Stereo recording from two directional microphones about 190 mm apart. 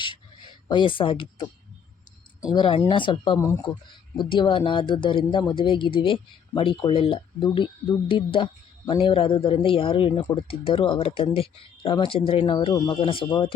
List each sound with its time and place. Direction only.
0.0 s a sound: 25° left (ahead or behind)
2.5 s speech: 25° left (ahead or behind)
4.2 s speech: 25° left (ahead or behind)